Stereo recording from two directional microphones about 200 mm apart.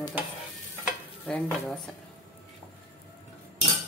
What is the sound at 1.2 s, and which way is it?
Speech, 5° left (ahead or behind).